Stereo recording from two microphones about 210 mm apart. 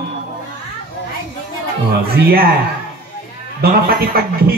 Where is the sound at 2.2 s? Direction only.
45° right (ahead or behind).